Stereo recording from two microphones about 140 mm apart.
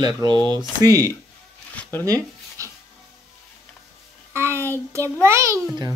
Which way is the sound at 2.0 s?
25° right (ahead or behind).